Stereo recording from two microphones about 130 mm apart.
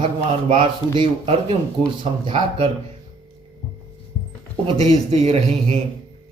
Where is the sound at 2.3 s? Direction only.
40° right (ahead or behind).